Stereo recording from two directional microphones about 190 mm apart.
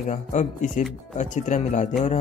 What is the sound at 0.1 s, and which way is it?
Speech, 40° left (ahead or behind).